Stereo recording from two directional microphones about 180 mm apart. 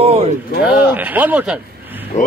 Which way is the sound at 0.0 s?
35° right (ahead or behind).